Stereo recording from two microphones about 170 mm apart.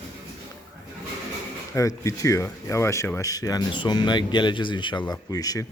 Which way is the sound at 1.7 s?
20° left (ahead or behind).